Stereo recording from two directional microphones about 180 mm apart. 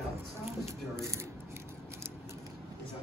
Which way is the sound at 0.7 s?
15° right (ahead or behind).